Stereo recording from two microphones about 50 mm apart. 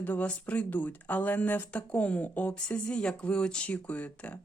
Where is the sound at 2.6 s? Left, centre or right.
Left.